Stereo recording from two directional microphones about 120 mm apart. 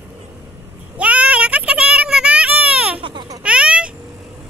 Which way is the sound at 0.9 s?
10° right (ahead or behind).